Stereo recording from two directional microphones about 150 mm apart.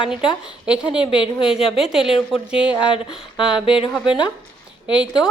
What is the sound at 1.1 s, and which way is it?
Speech, 35° left (ahead or behind).